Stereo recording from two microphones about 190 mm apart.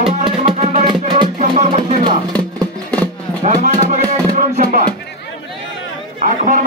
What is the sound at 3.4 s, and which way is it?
Music, 40° right (ahead or behind).